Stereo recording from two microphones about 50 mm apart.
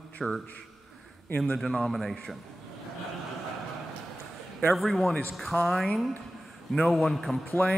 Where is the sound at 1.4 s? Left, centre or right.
Centre.